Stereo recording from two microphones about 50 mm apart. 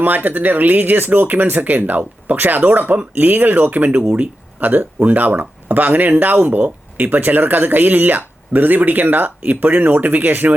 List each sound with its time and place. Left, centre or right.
0.0 s speech: right